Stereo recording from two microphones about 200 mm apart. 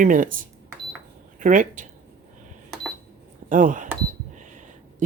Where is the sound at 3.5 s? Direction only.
40° right (ahead or behind).